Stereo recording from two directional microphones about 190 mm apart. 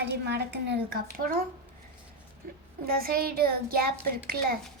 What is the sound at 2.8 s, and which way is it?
A child's voice, 55° right (ahead or behind).